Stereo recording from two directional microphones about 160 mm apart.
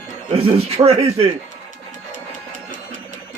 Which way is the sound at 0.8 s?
40° right (ahead or behind).